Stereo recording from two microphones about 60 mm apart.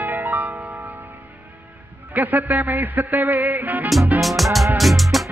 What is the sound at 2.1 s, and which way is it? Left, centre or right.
Music, right.